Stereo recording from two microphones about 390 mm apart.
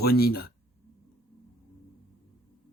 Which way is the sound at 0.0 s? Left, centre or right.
Left.